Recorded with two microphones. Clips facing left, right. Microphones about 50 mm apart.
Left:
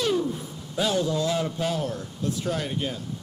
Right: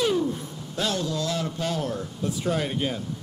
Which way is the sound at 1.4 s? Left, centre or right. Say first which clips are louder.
Left 1 dB; centre.